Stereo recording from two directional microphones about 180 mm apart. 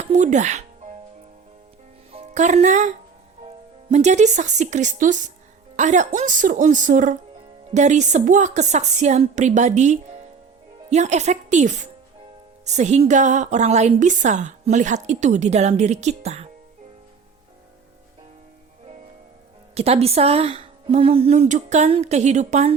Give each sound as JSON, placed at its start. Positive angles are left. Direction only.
{"t": 0.0, "sound": "speech", "side_deg": -40}
{"t": 2.1, "sound": "a woman's voice", "side_deg": -40}
{"t": 19.7, "sound": "a woman's voice", "side_deg": -35}